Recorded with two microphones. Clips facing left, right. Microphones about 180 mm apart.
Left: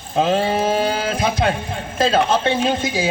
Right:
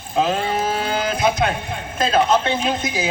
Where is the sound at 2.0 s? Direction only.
25° left (ahead or behind).